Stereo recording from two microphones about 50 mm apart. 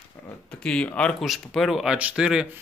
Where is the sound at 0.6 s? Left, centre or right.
Left.